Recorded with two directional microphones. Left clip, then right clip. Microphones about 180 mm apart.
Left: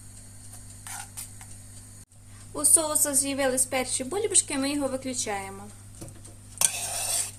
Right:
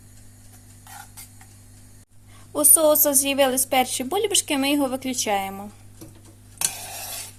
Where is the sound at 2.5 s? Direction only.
45° right (ahead or behind).